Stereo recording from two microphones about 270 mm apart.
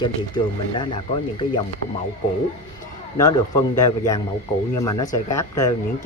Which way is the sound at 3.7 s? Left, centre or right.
Centre.